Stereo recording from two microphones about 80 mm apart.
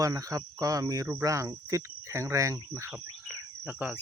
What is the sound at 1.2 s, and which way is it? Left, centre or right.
Cricket, right.